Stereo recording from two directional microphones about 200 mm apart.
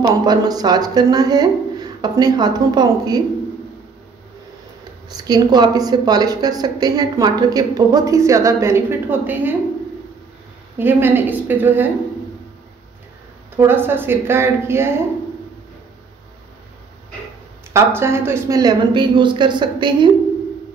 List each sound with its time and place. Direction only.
0.0 s a woman's voice: 20° right (ahead or behind)
5.1 s a woman's voice: 20° right (ahead or behind)
10.8 s a woman's voice: 10° right (ahead or behind)
13.6 s a woman's voice: 10° right (ahead or behind)
17.7 s a woman's voice: 10° right (ahead or behind)